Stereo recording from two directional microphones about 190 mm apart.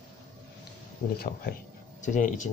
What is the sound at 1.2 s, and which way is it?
Speech, 55° left (ahead or behind).